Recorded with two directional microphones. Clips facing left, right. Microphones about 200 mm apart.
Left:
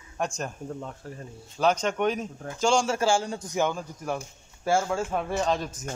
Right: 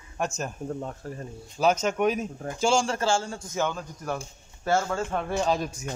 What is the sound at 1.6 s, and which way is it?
A man's voice, 5° right (ahead or behind).